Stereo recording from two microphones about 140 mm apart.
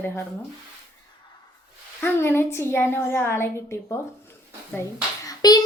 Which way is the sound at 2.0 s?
15° left (ahead or behind).